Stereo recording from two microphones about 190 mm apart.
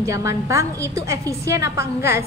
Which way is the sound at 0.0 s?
15° right (ahead or behind).